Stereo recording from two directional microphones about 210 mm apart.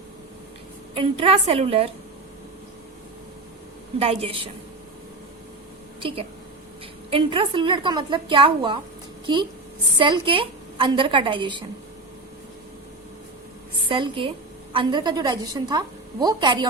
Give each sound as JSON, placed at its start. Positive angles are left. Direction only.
{"t": 0.9, "sound": "a woman's voice", "side_deg": -25}
{"t": 3.9, "sound": "a woman's voice", "side_deg": -30}
{"t": 6.0, "sound": "a woman's voice", "side_deg": -25}
{"t": 13.8, "sound": "a woman's voice", "side_deg": -25}